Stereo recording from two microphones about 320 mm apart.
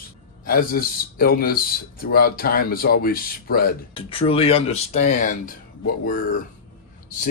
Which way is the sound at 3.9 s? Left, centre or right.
Centre.